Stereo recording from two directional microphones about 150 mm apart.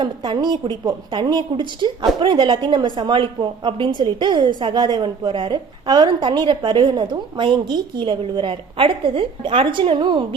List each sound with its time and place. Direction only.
0.0 s a woman's voice: 30° right (ahead or behind)